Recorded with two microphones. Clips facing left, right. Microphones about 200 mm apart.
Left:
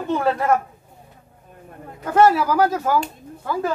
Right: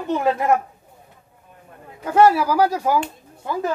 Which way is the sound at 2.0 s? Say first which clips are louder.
Right 1 dB; 10° right (ahead or behind).